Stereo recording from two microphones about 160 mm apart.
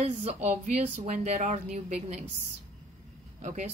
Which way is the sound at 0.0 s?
45° right (ahead or behind).